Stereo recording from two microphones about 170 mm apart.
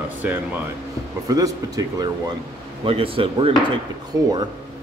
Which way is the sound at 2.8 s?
35° right (ahead or behind).